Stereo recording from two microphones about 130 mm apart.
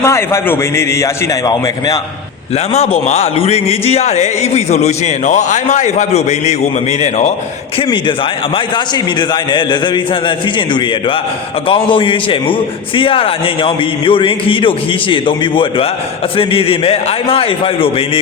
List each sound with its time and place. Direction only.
0.0 s a man's voice: 20° left (ahead or behind)
2.7 s speech: 55° left (ahead or behind)
9.3 s a man's voice: 35° left (ahead or behind)
11.7 s a man's voice: 40° left (ahead or behind)